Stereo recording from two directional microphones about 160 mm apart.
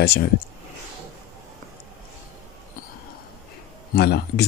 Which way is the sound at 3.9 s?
85° left.